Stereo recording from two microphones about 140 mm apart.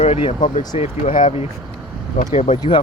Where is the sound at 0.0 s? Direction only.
45° left (ahead or behind).